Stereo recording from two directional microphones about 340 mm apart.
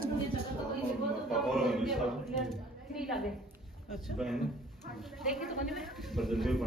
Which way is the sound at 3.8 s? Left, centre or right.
Centre.